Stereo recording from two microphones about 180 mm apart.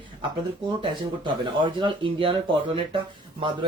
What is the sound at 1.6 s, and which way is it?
Speech, 30° right (ahead or behind).